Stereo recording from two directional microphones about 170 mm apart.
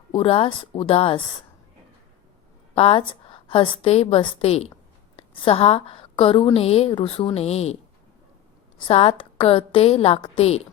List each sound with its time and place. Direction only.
0.1 s a woman's voice: 35° left (ahead or behind)
2.7 s a woman's voice: 35° left (ahead or behind)
8.9 s a woman's voice: 35° left (ahead or behind)